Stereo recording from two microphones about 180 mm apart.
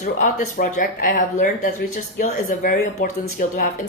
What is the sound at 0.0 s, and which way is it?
A woman's voice, 45° left (ahead or behind).